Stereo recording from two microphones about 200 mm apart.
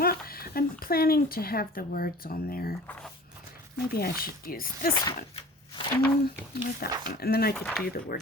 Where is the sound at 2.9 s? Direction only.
5° left (ahead or behind).